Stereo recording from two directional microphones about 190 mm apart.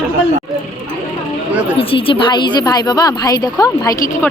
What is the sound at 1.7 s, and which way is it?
A woman's voice, 30° left (ahead or behind).